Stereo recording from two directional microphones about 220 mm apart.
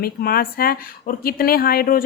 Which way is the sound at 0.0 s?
45° left (ahead or behind).